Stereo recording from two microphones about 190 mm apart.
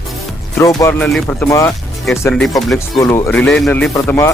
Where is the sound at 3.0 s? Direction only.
15° left (ahead or behind).